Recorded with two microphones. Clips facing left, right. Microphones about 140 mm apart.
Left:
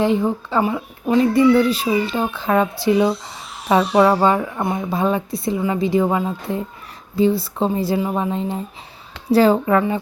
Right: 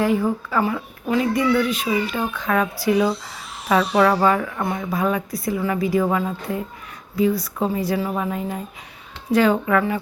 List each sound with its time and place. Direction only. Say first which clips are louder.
0.0 s a child's voice: left 2 dB; 25° left (ahead or behind)